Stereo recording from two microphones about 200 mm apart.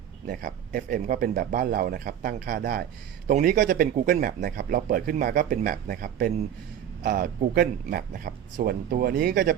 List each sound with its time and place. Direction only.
0.3 s a man's voice: 45° right (ahead or behind)